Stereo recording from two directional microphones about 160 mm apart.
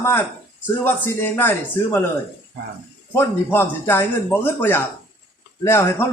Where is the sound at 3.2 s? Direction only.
15° left (ahead or behind).